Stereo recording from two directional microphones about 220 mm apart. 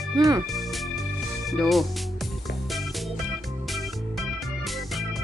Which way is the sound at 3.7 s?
Centre (ahead or behind).